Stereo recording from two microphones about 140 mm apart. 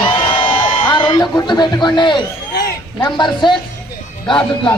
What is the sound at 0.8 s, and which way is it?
A man's voice, 35° left (ahead or behind).